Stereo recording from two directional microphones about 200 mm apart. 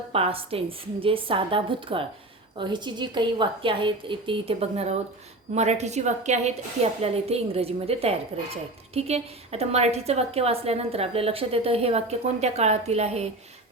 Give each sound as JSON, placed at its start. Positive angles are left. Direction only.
{"t": 0.1, "sound": "a woman's voice", "side_deg": -30}